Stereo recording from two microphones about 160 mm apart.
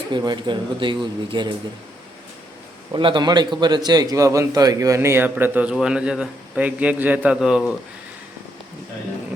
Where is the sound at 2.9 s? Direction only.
30° right (ahead or behind); by 7.6 s 5° right (ahead or behind).